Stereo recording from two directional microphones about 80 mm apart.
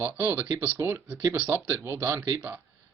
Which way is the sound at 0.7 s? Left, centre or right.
Right.